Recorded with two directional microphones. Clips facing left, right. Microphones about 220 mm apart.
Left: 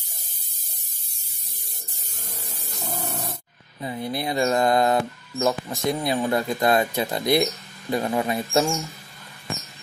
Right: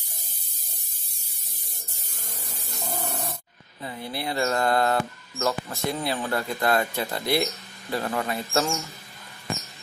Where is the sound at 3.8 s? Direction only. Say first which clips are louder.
Left 4 dB; 20° left (ahead or behind).